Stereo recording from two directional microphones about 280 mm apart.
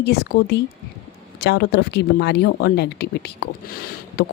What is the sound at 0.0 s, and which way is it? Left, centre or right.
Speech, left.